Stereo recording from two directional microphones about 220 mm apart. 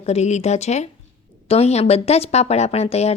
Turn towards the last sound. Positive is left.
turn(degrees=30)  # may be behind; listen again after turning